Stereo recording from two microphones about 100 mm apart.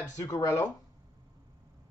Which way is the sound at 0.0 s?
40° left (ahead or behind).